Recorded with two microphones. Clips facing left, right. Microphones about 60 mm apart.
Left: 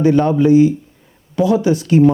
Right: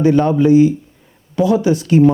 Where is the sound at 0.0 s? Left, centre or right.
Centre.